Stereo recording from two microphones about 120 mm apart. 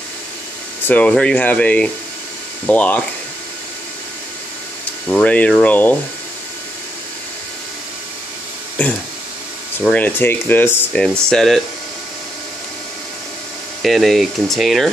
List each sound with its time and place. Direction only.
0.8 s speech: 10° left (ahead or behind)
5.0 s speech: 10° left (ahead or behind)
9.8 s speech: 15° left (ahead or behind)
10.9 s speech: 5° left (ahead or behind)
13.8 s speech: centre (ahead or behind)